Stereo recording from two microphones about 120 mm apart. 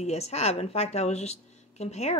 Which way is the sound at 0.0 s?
65° left (ahead or behind).